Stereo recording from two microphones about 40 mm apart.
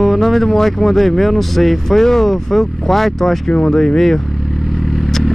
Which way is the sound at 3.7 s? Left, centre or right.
Centre.